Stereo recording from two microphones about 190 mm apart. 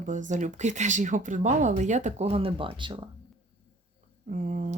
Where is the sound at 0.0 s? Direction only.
40° right (ahead or behind); by 3.0 s 25° right (ahead or behind).